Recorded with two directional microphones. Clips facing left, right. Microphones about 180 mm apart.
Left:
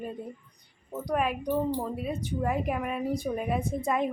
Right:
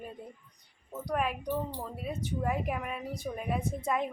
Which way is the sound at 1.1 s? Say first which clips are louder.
Left 3 dB; 5° left (ahead or behind).